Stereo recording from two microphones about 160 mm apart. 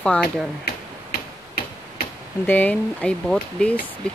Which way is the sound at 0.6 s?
70° left (ahead or behind).